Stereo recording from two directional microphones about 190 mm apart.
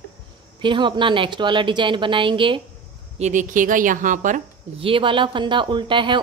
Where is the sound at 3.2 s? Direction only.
40° right (ahead or behind).